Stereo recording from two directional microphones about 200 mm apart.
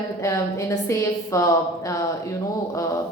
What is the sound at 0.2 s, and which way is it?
A woman's voice, 15° left (ahead or behind).